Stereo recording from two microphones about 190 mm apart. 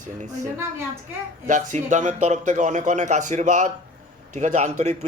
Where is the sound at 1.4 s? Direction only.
40° right (ahead or behind).